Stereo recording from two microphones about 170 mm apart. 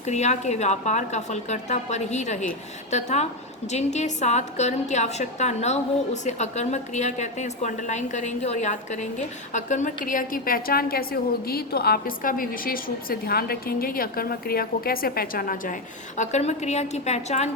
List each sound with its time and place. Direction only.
0.0 s a woman's voice: 40° left (ahead or behind)
16.1 s a woman's voice: 45° left (ahead or behind)